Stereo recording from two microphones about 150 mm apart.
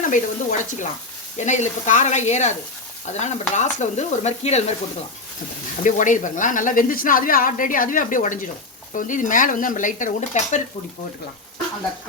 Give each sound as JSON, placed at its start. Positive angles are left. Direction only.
{"t": 0.1, "sound": "speech", "side_deg": 55}
{"t": 5.8, "sound": "speech", "side_deg": 60}